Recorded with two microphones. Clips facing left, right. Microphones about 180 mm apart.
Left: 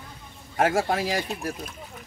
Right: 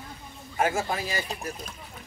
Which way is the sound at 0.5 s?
70° left (ahead or behind).